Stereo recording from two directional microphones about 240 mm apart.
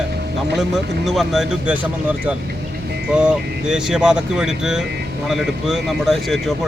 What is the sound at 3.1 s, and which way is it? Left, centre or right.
Speech, centre.